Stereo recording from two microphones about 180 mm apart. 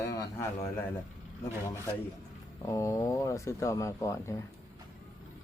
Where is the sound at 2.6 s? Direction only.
15° left (ahead or behind).